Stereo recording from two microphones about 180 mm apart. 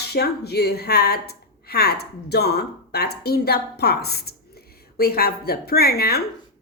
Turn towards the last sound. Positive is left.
turn(degrees=60)  # may be behind; listen again after turning